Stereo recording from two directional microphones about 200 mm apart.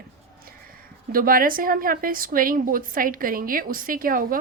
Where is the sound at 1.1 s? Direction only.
45° right (ahead or behind).